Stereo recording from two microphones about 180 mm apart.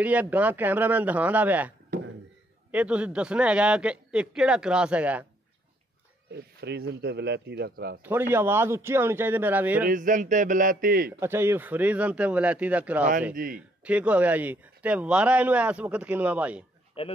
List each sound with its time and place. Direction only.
0.0 s speech: 10° right (ahead or behind)
1.9 s a sound: 55° right (ahead or behind)
2.7 s a man's voice: 5° right (ahead or behind)
6.3 s speech: 70° right (ahead or behind)
8.0 s speech: 10° right (ahead or behind)
9.8 s speech: 45° right (ahead or behind)
11.1 s speech: 15° right (ahead or behind)
13.3 s speech: 50° right (ahead or behind)
13.6 s speech: 5° right (ahead or behind)
17.0 s speech: 30° left (ahead or behind)